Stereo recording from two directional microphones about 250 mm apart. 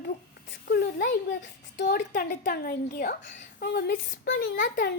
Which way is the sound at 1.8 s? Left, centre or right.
Left.